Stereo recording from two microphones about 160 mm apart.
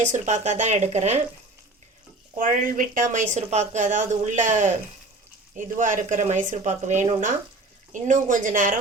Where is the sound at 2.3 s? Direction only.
60° right (ahead or behind).